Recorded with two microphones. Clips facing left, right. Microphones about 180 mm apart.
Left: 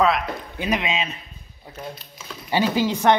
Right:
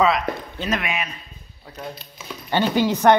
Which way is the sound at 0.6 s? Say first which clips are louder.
Left 4 dB; 15° left (ahead or behind).